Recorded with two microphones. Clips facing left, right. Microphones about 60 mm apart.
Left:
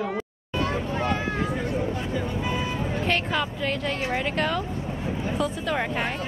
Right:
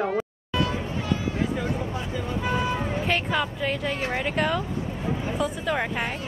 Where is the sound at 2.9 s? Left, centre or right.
Centre.